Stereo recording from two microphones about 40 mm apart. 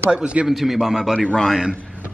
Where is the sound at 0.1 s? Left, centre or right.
Right.